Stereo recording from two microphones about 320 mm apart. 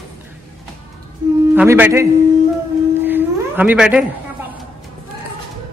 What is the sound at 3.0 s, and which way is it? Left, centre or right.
Humming, centre.